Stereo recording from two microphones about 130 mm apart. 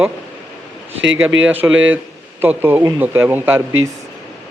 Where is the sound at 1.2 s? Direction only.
15° right (ahead or behind).